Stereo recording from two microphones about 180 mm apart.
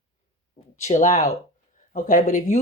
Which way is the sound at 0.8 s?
40° left (ahead or behind).